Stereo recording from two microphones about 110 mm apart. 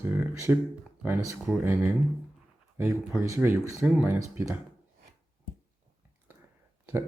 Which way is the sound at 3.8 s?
10° right (ahead or behind).